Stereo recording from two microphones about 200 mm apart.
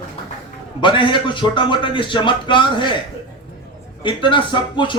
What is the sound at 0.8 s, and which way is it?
A man's voice, 25° left (ahead or behind).